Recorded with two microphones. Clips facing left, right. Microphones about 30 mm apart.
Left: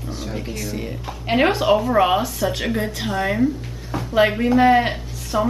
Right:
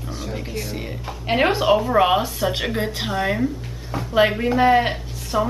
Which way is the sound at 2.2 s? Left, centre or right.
Centre.